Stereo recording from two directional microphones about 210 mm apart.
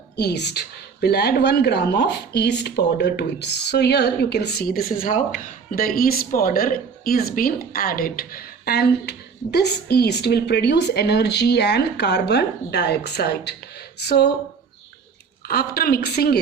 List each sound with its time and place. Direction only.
0.2 s speech: 55° left (ahead or behind)
15.4 s speech: 45° left (ahead or behind)